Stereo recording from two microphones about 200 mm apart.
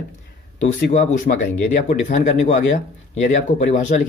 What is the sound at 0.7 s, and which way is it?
A man's voice, 40° left (ahead or behind).